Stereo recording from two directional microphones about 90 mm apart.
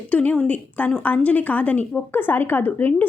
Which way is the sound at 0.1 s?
15° left (ahead or behind).